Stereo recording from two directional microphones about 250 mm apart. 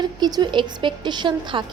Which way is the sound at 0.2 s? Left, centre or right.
Centre.